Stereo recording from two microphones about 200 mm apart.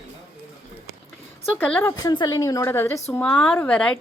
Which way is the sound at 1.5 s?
10° left (ahead or behind).